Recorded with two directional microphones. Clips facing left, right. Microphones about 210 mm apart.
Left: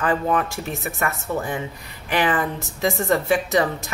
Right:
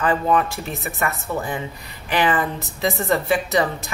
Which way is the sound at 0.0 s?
45° left (ahead or behind).